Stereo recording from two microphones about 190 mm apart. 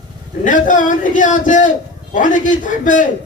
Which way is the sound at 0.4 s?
45° left (ahead or behind).